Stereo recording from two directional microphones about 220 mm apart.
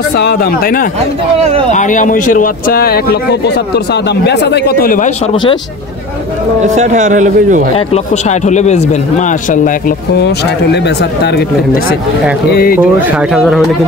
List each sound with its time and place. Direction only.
0.1 s speech: 45° left (ahead or behind)
5.3 s speech: 20° left (ahead or behind)
6.6 s a man's voice: 30° right (ahead or behind)
7.7 s a man's voice: 30° left (ahead or behind); by 12.0 s 50° left (ahead or behind)
12.7 s speech: 5° right (ahead or behind)